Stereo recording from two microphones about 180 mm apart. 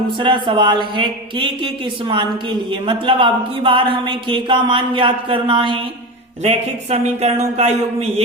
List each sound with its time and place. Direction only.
0.2 s a man's voice: 25° right (ahead or behind)